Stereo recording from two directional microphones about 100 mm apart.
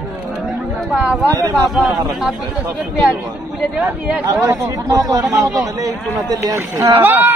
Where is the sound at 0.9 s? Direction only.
10° right (ahead or behind).